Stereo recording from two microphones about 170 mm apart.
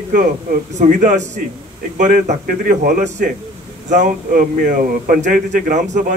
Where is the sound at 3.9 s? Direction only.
50° right (ahead or behind).